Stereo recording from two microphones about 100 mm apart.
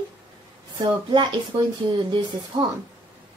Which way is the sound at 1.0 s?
50° right (ahead or behind).